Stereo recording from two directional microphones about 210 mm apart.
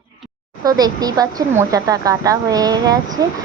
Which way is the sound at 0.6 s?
20° right (ahead or behind).